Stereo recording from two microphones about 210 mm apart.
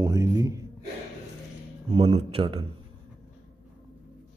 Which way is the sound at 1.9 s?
25° right (ahead or behind).